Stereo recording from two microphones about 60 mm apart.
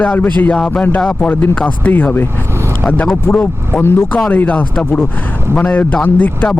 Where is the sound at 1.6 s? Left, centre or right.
Left.